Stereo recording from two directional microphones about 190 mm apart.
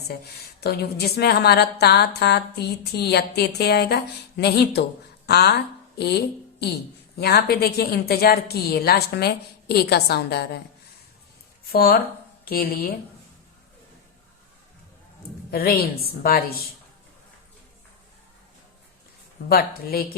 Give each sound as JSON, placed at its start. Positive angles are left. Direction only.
{"t": 0.6, "sound": "a woman's voice", "side_deg": 55}
{"t": 7.2, "sound": "a woman's voice", "side_deg": 55}
{"t": 11.7, "sound": "a woman's voice", "side_deg": 55}
{"t": 15.4, "sound": "a woman's voice", "side_deg": 55}
{"t": 19.5, "sound": "a woman's voice", "side_deg": 50}